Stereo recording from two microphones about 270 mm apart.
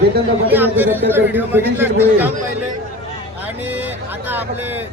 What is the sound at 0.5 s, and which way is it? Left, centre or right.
A man's voice, centre.